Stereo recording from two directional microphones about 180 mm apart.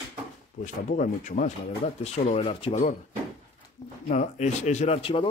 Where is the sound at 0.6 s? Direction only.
45° left (ahead or behind).